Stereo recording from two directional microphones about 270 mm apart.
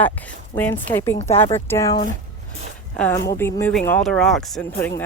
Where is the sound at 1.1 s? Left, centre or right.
Left.